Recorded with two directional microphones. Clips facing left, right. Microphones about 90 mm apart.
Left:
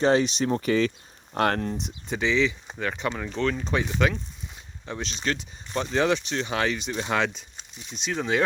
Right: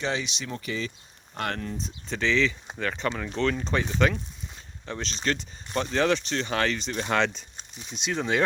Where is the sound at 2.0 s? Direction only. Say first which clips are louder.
Left 1 dB; 15° left (ahead or behind).